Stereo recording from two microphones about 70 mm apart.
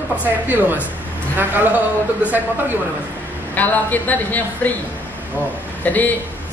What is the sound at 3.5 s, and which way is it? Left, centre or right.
A woman's voice, left.